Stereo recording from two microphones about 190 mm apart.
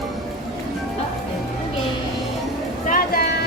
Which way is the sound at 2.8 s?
50° left (ahead or behind).